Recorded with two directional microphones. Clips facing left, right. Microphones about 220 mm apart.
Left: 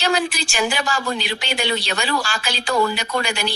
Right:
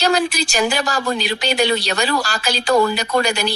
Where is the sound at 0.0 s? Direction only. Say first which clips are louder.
Right 3 dB; 40° right (ahead or behind).